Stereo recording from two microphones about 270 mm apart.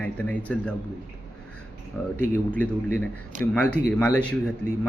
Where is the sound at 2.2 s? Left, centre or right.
Centre.